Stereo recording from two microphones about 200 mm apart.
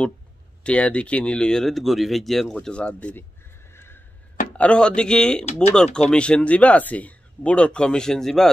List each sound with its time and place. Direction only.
0.7 s speech: 5° left (ahead or behind)
3.7 s neigh: 10° left (ahead or behind)
4.6 s speech: 5° left (ahead or behind)
5.4 s speech: 35° left (ahead or behind)
5.9 s speech: 5° left (ahead or behind)